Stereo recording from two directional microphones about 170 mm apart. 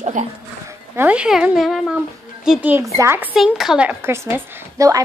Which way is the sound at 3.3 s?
Centre (ahead or behind).